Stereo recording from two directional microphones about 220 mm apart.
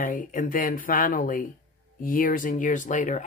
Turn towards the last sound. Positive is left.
turn(degrees=35)  # may be behind; listen again after turning